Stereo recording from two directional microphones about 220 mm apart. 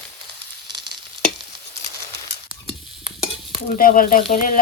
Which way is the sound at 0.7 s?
20° right (ahead or behind).